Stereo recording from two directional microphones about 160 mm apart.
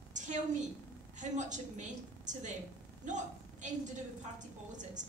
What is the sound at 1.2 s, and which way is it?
A woman's voice, 50° right (ahead or behind).